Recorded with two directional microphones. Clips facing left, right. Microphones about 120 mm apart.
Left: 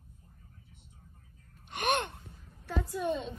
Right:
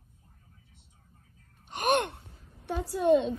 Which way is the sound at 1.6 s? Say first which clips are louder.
Right 4 dB; 40° right (ahead or behind).